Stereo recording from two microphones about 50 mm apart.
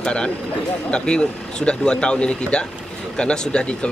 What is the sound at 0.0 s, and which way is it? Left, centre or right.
Speech, centre.